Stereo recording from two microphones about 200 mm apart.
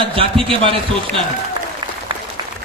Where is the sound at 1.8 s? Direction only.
20° right (ahead or behind).